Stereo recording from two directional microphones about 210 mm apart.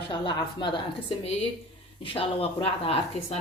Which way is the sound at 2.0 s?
25° left (ahead or behind).